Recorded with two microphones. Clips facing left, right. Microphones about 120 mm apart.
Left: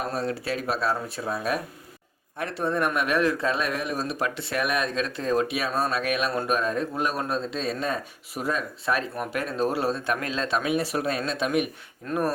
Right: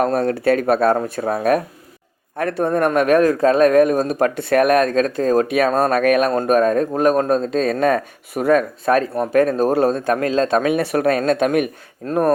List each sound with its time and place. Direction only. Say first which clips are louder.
0.0 s speech: right 12 dB; 55° right (ahead or behind)